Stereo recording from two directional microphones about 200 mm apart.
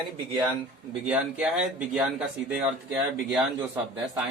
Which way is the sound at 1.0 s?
5° right (ahead or behind).